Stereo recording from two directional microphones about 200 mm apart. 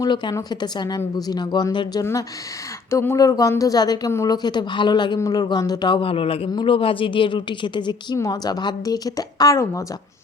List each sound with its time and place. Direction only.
0.0 s a woman's voice: 20° left (ahead or behind)